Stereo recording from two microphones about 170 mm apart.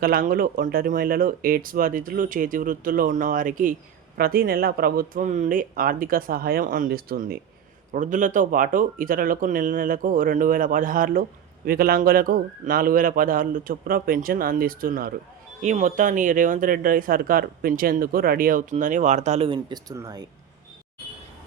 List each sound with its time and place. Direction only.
0.0 s speech: 60° right (ahead or behind)
7.9 s speech: 50° right (ahead or behind)
15.6 s speech: 45° right (ahead or behind)
19.5 s speech: 25° right (ahead or behind)